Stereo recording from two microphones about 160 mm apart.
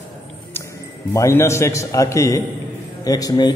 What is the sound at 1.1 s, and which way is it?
A man's voice, 20° left (ahead or behind).